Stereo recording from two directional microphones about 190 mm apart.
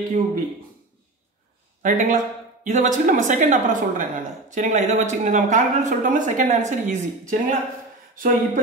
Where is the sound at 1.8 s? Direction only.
45° right (ahead or behind).